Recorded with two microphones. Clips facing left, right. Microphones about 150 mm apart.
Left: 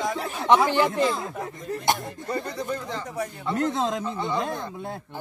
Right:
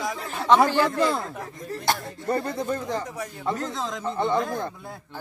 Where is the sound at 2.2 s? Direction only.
50° right (ahead or behind).